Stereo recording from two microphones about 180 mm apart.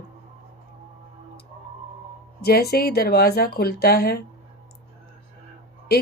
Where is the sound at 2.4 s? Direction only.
60° left (ahead or behind).